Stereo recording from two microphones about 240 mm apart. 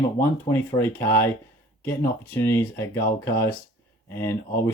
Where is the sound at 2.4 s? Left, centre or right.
Centre.